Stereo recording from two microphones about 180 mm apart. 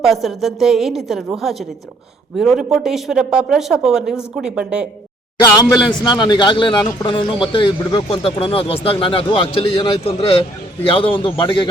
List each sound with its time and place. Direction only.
0.0 s speech: centre (ahead or behind)
5.4 s a man's voice: 20° left (ahead or behind)